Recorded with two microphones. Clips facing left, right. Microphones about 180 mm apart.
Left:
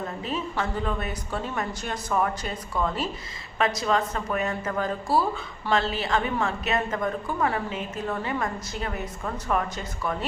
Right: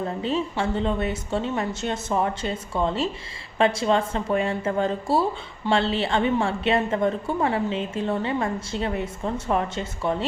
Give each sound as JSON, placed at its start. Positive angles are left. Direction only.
{"t": 0.2, "sound": "speech", "side_deg": -25}